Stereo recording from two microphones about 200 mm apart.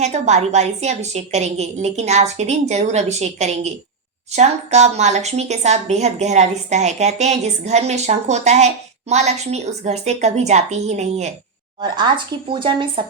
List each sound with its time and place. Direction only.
0.0 s a woman's voice: 35° right (ahead or behind)
11.8 s speech: 20° right (ahead or behind)